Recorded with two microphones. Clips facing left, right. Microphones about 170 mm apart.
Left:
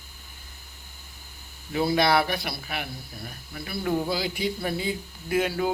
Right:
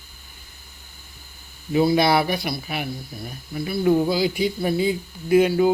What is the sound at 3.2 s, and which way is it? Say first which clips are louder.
Speech: right 9 dB; 20° right (ahead or behind).